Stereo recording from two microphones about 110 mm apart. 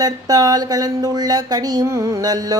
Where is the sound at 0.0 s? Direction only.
35° right (ahead or behind).